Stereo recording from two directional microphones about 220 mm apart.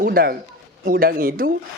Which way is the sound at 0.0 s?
40° right (ahead or behind).